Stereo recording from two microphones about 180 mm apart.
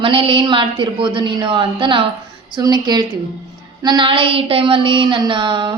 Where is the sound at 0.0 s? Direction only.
30° right (ahead or behind).